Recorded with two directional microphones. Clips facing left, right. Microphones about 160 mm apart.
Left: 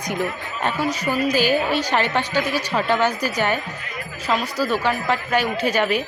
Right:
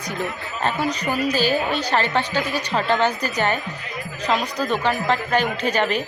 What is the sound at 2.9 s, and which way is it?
Speech, 10° left (ahead or behind).